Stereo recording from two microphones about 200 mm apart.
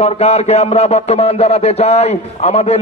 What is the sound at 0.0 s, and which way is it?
A man's voice, 30° left (ahead or behind).